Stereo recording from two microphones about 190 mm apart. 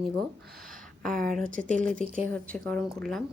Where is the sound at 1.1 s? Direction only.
45° right (ahead or behind).